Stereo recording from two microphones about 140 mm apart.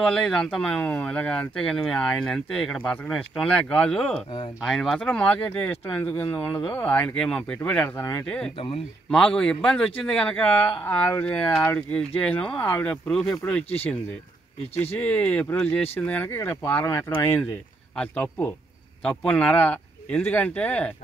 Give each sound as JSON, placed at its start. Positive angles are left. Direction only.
{"t": 0.0, "sound": "speech", "side_deg": 5}
{"t": 8.5, "sound": "speech", "side_deg": 40}
{"t": 9.1, "sound": "a man's voice", "side_deg": 5}
{"t": 15.0, "sound": "speech", "side_deg": 10}